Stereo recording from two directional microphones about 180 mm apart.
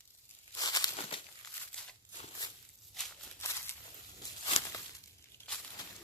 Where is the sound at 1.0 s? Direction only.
30° left (ahead or behind).